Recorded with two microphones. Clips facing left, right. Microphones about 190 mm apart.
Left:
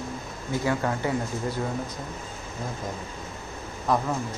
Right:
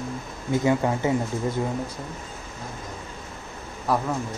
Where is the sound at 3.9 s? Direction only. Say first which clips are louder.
Even; 5° right (ahead or behind).